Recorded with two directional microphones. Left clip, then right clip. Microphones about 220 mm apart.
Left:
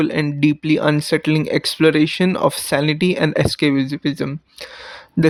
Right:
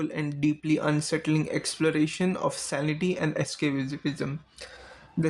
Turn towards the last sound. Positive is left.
turn(degrees=45)  # may be behind; listen again after turning